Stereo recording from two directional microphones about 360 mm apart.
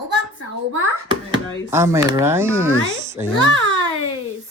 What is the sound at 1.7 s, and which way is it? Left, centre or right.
Speech, centre.